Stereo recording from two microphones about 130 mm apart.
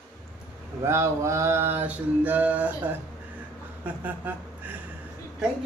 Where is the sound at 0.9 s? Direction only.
20° right (ahead or behind).